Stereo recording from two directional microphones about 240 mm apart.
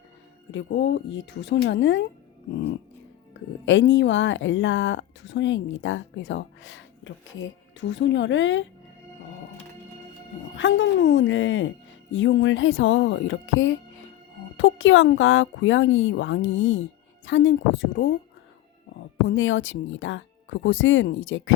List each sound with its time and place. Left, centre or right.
0.5 s speech: left
3.7 s speech: left
10.5 s speech: left
19.3 s speech: left